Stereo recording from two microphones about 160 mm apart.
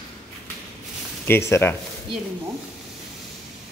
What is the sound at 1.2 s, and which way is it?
Speech, 15° left (ahead or behind).